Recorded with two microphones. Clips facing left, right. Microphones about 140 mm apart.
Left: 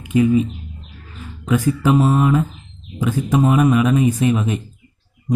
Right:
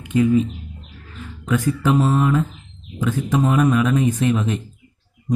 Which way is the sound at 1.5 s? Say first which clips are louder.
Left 2 dB; 10° left (ahead or behind).